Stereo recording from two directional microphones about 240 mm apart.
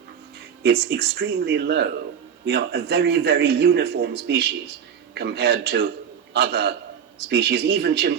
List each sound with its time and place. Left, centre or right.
0.6 s a man's voice: right